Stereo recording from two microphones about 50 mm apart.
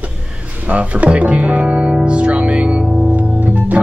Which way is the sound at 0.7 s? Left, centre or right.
Right.